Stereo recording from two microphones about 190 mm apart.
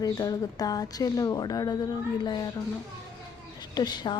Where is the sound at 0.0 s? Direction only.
20° left (ahead or behind).